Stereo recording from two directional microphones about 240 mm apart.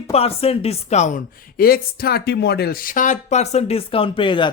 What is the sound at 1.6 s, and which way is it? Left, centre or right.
Speech, left.